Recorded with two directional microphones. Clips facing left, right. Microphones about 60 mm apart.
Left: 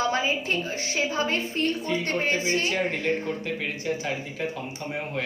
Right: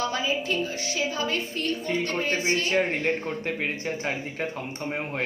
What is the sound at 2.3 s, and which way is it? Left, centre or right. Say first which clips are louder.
Speech: right 1 dB; right.